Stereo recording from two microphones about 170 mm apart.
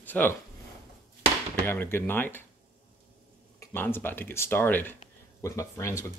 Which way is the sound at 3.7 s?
10° left (ahead or behind).